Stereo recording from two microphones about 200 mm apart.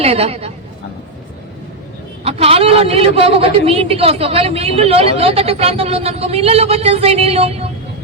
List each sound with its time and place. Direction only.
0.0 s a woman's voice: 30° right (ahead or behind)
2.2 s a man's voice: 30° right (ahead or behind)